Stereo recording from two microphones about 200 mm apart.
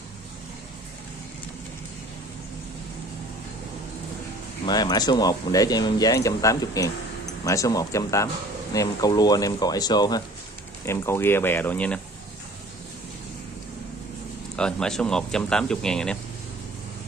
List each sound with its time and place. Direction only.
4.6 s speech: 20° left (ahead or behind)
14.6 s speech: 5° left (ahead or behind)